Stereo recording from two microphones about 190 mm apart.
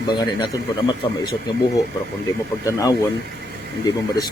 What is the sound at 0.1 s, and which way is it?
A man's voice, 20° left (ahead or behind).